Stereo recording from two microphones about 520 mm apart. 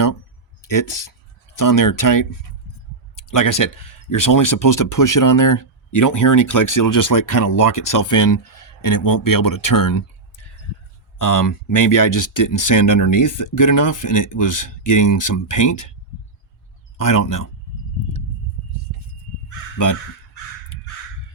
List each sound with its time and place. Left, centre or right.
0.7 s speech: left
17.1 s speech: left